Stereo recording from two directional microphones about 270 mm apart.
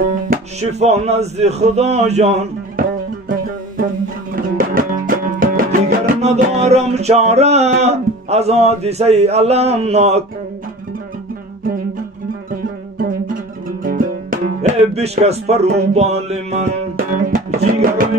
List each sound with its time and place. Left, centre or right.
0.3 s speech: right
4.4 s music: right
13.8 s music: right
15.9 s speech: right
17.3 s music: right